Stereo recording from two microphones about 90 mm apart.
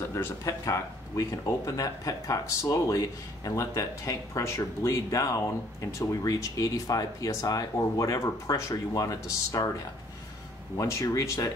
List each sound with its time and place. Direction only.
0.0 s speech: 30° left (ahead or behind)
10.8 s speech: 35° left (ahead or behind)